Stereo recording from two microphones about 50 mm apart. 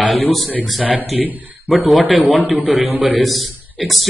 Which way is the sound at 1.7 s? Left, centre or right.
Centre.